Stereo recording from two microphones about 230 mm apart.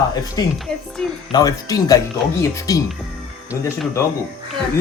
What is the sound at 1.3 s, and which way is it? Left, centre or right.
Speech, centre.